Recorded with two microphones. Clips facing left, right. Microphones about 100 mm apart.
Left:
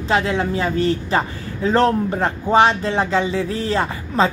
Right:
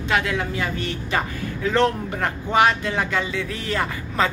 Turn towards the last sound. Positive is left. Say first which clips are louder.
# left 4 dB
turn(degrees=30)  # may be behind; listen again after turning